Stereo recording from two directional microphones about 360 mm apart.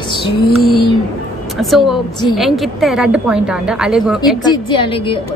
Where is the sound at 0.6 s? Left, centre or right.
Left.